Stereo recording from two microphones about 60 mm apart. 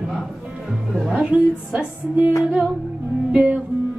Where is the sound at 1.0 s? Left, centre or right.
Centre.